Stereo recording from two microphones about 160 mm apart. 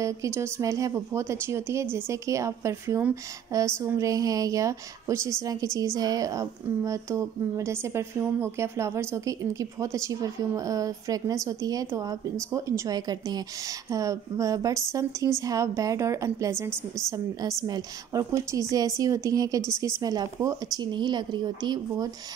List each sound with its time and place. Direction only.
0.0 s a woman's voice: 20° right (ahead or behind)